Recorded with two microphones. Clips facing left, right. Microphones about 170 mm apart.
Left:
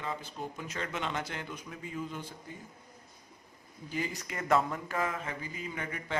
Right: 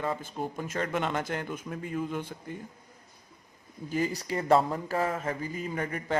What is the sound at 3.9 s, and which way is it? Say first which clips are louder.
Speech: right 7 dB; 40° right (ahead or behind).